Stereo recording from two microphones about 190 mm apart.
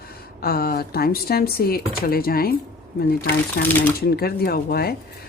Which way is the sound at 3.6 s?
65° left (ahead or behind).